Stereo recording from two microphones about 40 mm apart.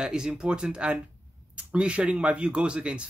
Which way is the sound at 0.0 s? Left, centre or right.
Centre.